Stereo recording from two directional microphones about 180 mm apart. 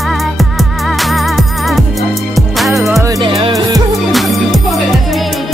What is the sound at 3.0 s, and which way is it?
Music, 20° right (ahead or behind).